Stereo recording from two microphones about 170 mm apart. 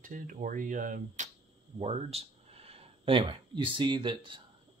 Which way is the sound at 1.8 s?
40° right (ahead or behind).